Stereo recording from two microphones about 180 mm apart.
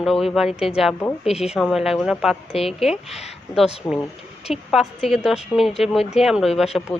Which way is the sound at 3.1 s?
35° left (ahead or behind).